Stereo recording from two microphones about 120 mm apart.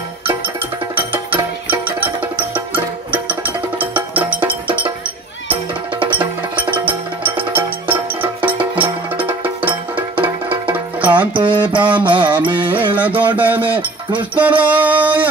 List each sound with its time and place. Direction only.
0.9 s music: 45° right (ahead or behind)
2.0 s music: 15° right (ahead or behind)
6.1 s music: 15° right (ahead or behind)
11.1 s music: 40° right (ahead or behind)
12.9 s music: 10° right (ahead or behind)